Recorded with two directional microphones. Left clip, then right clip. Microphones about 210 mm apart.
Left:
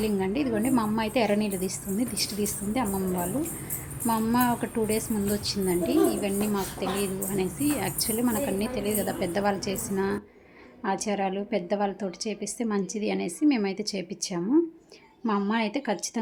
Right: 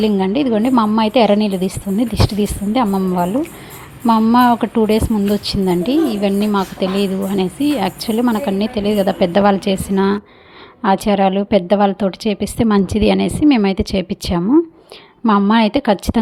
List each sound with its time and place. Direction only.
0.0 s a woman's voice: 30° right (ahead or behind)